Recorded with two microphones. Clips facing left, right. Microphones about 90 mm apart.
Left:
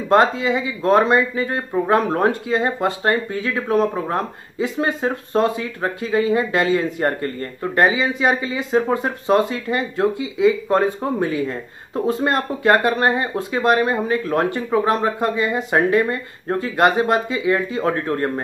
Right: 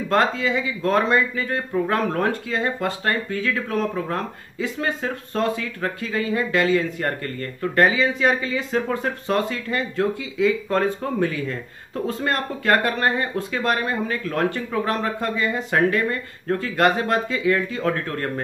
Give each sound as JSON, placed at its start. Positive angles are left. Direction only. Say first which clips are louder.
{"t": 0.1, "sound": "speech", "louder": "left 5 dB", "side_deg": 20}